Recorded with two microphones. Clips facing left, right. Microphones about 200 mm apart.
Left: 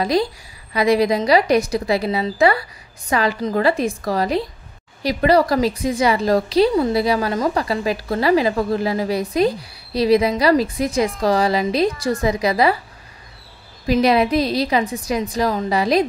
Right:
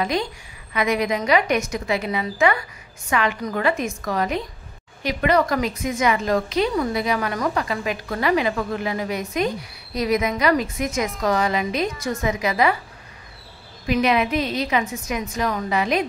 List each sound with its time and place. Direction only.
0.0 s a woman's voice: 35° left (ahead or behind)
13.8 s a woman's voice: 35° left (ahead or behind)